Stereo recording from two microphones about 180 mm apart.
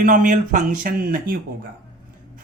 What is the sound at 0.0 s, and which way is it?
Speech, 45° right (ahead or behind).